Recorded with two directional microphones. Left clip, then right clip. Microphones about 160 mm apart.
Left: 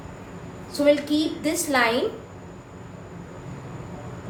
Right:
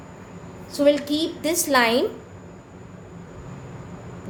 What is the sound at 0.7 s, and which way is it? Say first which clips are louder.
A woman's voice: right 1 dB; 70° right (ahead or behind).